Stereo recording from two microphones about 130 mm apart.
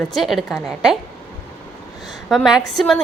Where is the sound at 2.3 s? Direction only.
Centre (ahead or behind).